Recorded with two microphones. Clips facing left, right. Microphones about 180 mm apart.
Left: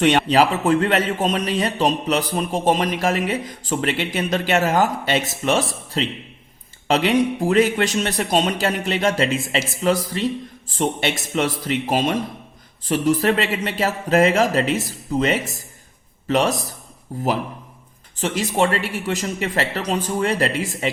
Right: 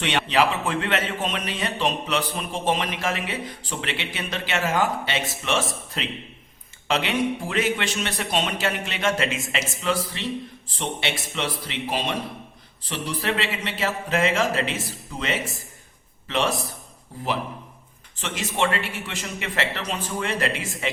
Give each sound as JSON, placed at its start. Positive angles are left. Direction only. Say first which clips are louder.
{"t": 0.0, "sound": "a man's voice", "louder": "left 6 dB", "side_deg": 40}